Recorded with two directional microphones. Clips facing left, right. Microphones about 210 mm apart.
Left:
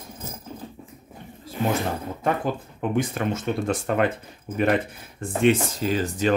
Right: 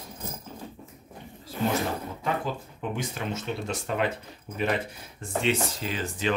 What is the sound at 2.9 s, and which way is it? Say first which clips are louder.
Speech: left 8 dB; 50° left (ahead or behind).